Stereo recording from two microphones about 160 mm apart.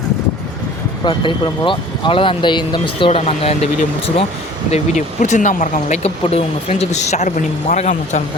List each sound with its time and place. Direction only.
1.0 s speech: 30° left (ahead or behind); by 8.2 s 50° left (ahead or behind)